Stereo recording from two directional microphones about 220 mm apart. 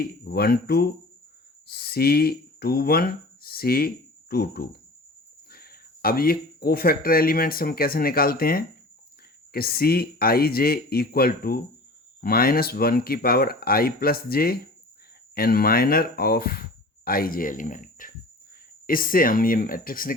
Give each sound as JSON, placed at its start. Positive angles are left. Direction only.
{"t": 0.0, "sound": "speech", "side_deg": 45}